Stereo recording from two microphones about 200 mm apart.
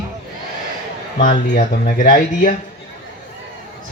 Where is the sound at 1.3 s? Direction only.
30° left (ahead or behind).